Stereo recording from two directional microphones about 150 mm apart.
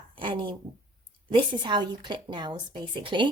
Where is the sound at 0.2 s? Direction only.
30° right (ahead or behind).